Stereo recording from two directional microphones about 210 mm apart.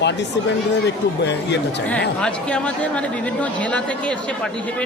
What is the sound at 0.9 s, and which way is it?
Speech, 55° left (ahead or behind).